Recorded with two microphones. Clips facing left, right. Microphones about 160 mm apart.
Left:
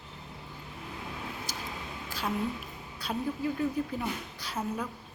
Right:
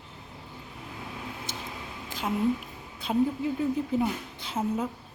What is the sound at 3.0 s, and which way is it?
A woman's voice, 20° right (ahead or behind).